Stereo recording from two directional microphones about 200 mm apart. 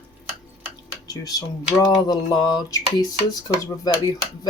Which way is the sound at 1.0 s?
20° left (ahead or behind).